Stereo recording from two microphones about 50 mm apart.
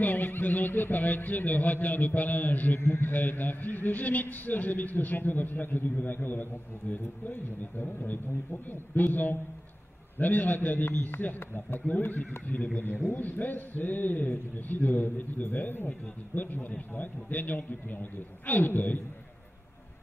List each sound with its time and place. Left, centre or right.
0.0 s speech: left
7.8 s speech: left